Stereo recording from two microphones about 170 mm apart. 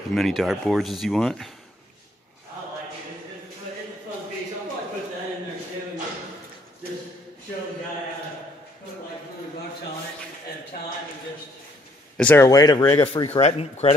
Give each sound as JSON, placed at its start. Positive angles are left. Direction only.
{"t": 0.1, "sound": "speech", "side_deg": 0}
{"t": 12.2, "sound": "speech", "side_deg": 10}
{"t": 12.4, "sound": "speech", "side_deg": 25}